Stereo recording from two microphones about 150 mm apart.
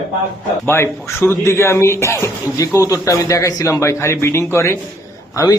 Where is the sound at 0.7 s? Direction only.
15° left (ahead or behind).